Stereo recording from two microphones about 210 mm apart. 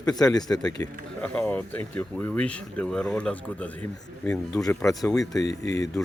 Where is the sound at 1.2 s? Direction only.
5° left (ahead or behind).